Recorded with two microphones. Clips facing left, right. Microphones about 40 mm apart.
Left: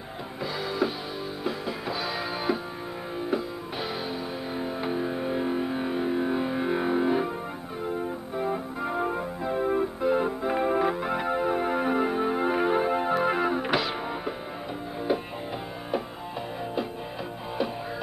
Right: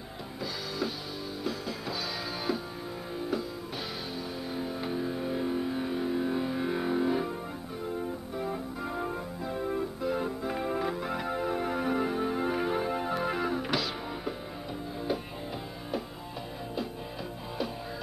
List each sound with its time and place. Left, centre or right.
0.4 s music: left
4.6 s music: left